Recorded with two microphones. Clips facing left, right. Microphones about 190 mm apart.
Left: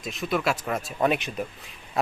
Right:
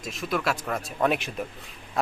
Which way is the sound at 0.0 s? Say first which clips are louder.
Left 2 dB; centre (ahead or behind).